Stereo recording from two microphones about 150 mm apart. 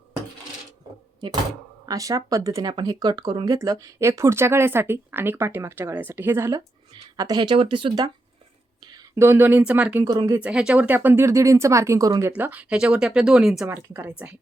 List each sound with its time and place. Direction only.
1.2 s speech: 30° right (ahead or behind)
8.8 s whispering: 30° right (ahead or behind)
9.1 s speech: 15° right (ahead or behind)
10.0 s speech: 20° right (ahead or behind)
10.4 s speech: 5° right (ahead or behind); by 12.3 s 20° right (ahead or behind)
12.4 s speech: 10° right (ahead or behind)
13.7 s speech: 15° right (ahead or behind)